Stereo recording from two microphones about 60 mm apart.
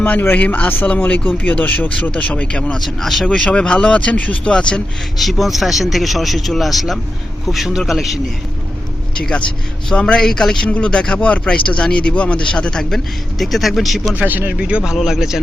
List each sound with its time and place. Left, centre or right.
0.0 s speech: left
2.7 s speech: centre; by 4.5 s left
5.1 s speech: centre
9.1 s speech: centre
13.4 s speech: centre
14.2 s speech: right
14.6 s speech: centre